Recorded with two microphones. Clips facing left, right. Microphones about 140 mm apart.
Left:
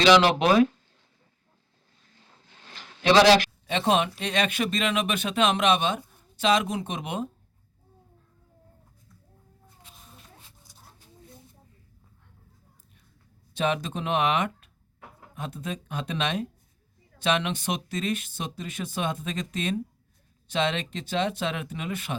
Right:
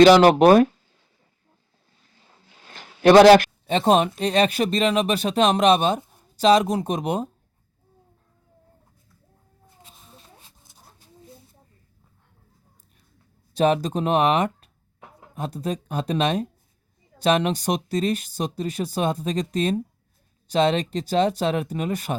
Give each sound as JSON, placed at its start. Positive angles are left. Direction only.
{"t": 0.0, "sound": "speech", "side_deg": -45}
{"t": 2.7, "sound": "a sound", "side_deg": -50}
{"t": 3.7, "sound": "speech", "side_deg": -40}
{"t": 13.5, "sound": "speech", "side_deg": -40}